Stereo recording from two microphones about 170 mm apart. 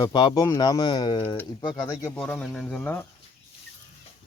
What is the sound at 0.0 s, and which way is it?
Speech, 25° left (ahead or behind).